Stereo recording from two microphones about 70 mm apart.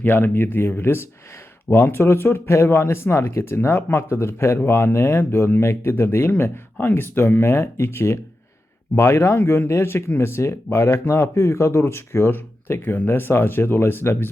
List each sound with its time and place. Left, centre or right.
0.0 s speech: left